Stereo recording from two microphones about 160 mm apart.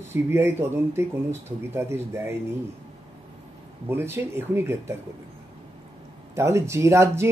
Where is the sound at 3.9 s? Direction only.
15° right (ahead or behind).